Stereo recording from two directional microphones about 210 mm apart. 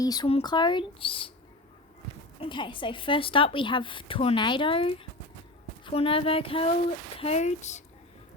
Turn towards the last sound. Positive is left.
turn(degrees=35)  # may be behind; listen again after turning